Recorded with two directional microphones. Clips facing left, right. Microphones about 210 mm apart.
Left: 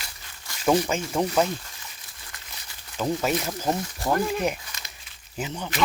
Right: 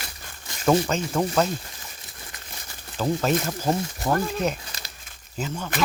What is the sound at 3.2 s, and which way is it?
Speech, 10° left (ahead or behind).